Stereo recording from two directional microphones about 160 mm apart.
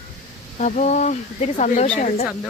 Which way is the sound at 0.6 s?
50° left (ahead or behind).